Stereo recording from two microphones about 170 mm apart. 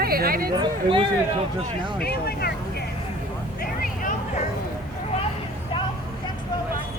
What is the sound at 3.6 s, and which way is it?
Vehicle, 55° left (ahead or behind).